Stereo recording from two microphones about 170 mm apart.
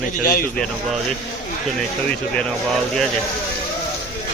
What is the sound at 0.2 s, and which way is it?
Speech, 60° left (ahead or behind).